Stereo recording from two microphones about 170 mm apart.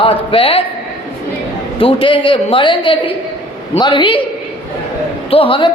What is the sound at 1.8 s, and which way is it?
A woman's voice, 30° left (ahead or behind).